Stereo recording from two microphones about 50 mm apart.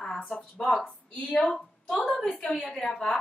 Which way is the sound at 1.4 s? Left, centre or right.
Centre.